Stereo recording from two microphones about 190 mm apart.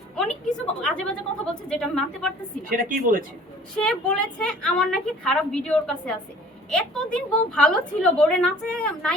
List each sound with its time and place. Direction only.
0.4 s a woman's voice: 5° left (ahead or behind)
2.6 s a woman's voice: 45° right (ahead or behind)
3.8 s a woman's voice: 5° left (ahead or behind)